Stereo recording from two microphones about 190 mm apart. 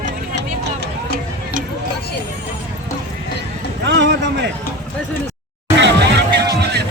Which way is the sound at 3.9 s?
65° right (ahead or behind).